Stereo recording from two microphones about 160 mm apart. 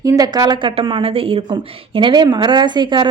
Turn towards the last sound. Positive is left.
turn(degrees=-30)  # may be behind; listen again after turning